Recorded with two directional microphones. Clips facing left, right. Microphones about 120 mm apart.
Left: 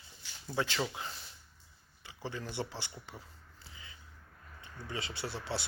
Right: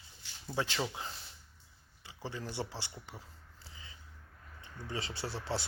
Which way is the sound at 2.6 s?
20° right (ahead or behind).